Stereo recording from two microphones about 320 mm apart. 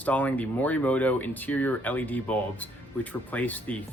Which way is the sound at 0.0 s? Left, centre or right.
Centre.